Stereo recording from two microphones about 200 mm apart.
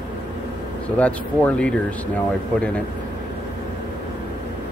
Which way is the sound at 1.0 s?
5° left (ahead or behind).